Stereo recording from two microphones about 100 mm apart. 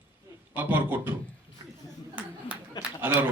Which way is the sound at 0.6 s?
20° right (ahead or behind).